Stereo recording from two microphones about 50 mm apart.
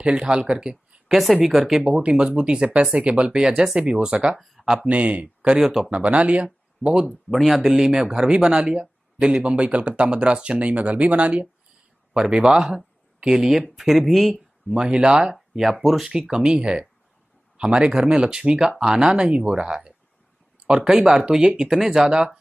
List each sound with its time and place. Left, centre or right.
0.0 s speech: centre
1.1 s speech: centre
1.9 s speech: centre
4.4 s speech: centre
4.8 s speech: right
5.6 s speech: centre
5.9 s speech: right
7.1 s speech: centre
7.6 s speech: centre; by 11.4 s right
12.1 s speech: centre
14.7 s speech: centre
15.3 s speech: centre
16.1 s speech: centre